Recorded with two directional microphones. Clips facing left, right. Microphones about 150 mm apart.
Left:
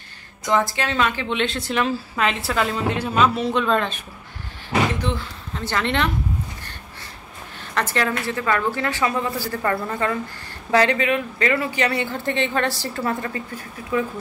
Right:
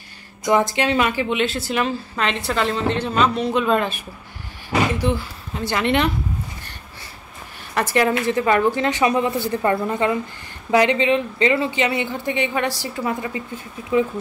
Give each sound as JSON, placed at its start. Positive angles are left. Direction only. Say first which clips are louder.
{"t": 0.5, "sound": "a woman's voice", "louder": "right 3 dB", "side_deg": -15}
{"t": 7.7, "sound": "a woman's voice", "louder": "right 4 dB", "side_deg": -10}